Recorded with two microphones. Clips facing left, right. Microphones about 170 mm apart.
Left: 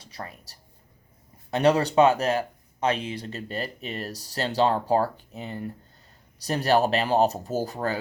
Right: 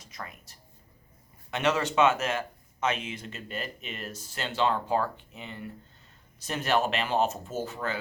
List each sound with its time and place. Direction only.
0.0 s speech: 35° left (ahead or behind)